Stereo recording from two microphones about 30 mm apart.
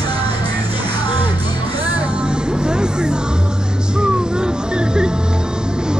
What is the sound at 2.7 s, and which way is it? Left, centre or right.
Music, right.